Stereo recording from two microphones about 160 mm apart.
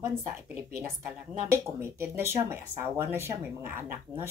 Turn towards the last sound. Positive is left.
turn(degrees=-15)  # may be behind; listen again after turning